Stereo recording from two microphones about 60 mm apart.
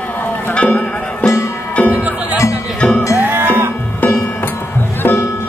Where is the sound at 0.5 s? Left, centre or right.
Left.